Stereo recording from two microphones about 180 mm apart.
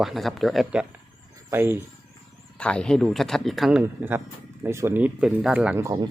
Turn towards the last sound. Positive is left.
turn(degrees=-20)  # may be behind; listen again after turning